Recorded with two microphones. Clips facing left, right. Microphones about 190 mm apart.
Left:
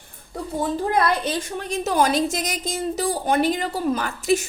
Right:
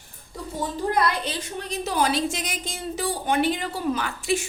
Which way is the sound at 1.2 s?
50° left (ahead or behind).